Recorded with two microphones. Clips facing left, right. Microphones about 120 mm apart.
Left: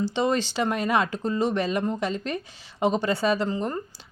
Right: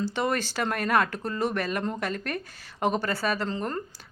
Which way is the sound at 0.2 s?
15° left (ahead or behind).